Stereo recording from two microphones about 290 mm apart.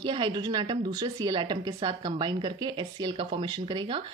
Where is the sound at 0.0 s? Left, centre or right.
Centre.